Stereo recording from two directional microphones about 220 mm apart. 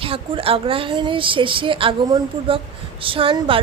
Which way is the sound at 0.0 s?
25° right (ahead or behind).